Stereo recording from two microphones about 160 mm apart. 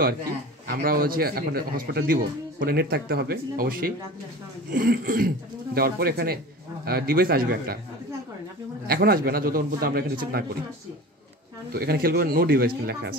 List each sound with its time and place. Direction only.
0.7 s a man's voice: 65° right (ahead or behind)
4.7 s throat clearing: 65° right (ahead or behind)
5.8 s a man's voice: 70° right (ahead or behind)
8.8 s a man's voice: 70° right (ahead or behind)
11.7 s a man's voice: 70° right (ahead or behind)